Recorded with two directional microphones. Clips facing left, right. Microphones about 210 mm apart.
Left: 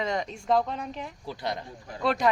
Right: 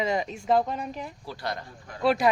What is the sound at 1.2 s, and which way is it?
Speech, 20° left (ahead or behind).